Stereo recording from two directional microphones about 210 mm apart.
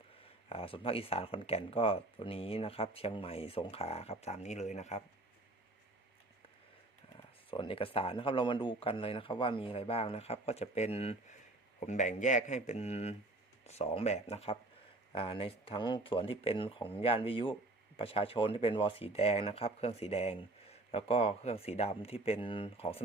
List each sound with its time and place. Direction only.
0.4 s speech: 25° left (ahead or behind)
7.5 s speech: 25° left (ahead or behind)